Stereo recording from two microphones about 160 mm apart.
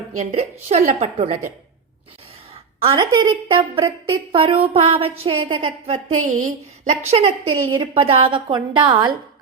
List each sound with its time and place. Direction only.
0.2 s a woman's voice: 40° right (ahead or behind)
2.8 s a woman's voice: 30° right (ahead or behind)
6.3 s a woman's voice: 50° right (ahead or behind)
7.1 s a woman's voice: 35° right (ahead or behind)